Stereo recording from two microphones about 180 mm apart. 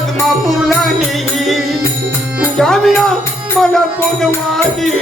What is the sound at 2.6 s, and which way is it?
Music, centre (ahead or behind).